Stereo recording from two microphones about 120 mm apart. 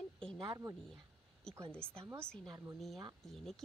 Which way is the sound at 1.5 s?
5° left (ahead or behind).